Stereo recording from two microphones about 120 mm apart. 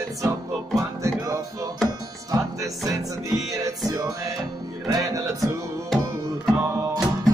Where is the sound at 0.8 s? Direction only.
30° right (ahead or behind).